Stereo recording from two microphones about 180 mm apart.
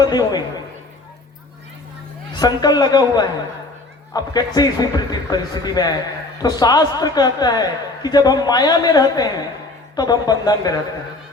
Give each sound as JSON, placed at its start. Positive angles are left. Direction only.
{"t": 0.0, "sound": "a man's voice", "side_deg": 20}
{"t": 2.3, "sound": "a man's voice", "side_deg": 25}